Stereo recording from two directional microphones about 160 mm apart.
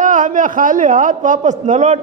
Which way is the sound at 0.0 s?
55° right (ahead or behind).